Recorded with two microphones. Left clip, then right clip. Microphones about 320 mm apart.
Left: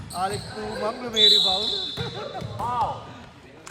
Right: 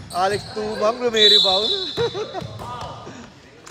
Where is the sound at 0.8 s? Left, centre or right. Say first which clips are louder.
Right 4 dB; right.